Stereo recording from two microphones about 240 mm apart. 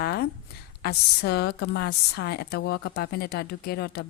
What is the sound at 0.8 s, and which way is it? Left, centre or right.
A woman's voice, left.